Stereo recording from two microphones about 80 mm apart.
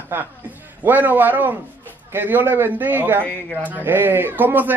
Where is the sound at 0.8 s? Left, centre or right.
Right.